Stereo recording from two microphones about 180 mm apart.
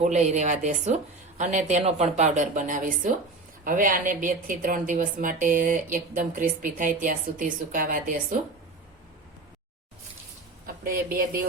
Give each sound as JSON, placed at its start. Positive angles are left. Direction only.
{"t": 0.0, "sound": "a woman's voice", "side_deg": -40}
{"t": 10.8, "sound": "a woman's voice", "side_deg": -50}